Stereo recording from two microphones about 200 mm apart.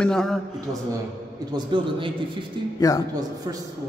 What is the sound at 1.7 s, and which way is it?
Speech, 25° right (ahead or behind).